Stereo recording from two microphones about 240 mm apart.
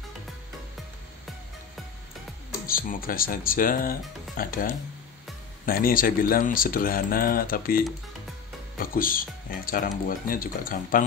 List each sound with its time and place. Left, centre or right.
2.6 s speech: left